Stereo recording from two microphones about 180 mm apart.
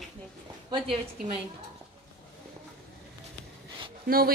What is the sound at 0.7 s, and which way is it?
Speech, 30° right (ahead or behind).